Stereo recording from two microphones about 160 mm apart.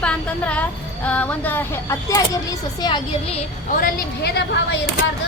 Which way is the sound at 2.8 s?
25° left (ahead or behind).